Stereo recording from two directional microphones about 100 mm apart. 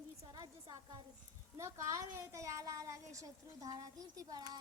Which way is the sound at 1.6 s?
30° right (ahead or behind).